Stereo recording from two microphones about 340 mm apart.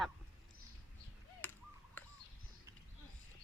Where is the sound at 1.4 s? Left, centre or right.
Centre.